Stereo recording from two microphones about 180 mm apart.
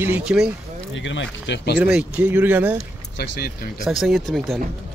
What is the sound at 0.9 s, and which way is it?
Speech, 90° left.